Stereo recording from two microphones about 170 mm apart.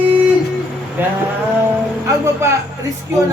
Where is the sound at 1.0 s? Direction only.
10° right (ahead or behind).